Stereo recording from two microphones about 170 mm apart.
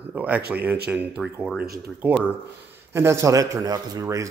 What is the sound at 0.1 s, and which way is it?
A man's voice, 10° right (ahead or behind).